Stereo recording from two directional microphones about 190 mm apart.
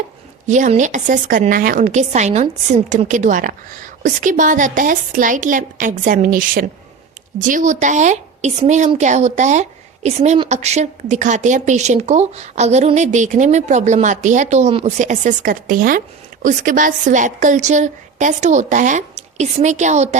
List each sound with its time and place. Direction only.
0.4 s a woman's voice: 40° right (ahead or behind)